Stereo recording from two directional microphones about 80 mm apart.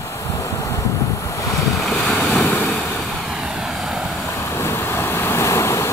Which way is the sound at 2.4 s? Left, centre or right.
Centre.